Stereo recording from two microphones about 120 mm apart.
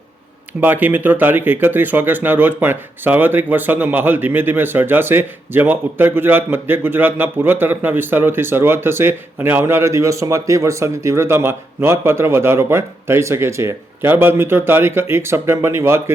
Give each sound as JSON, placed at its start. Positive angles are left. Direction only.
{"t": 0.6, "sound": "speech", "side_deg": -15}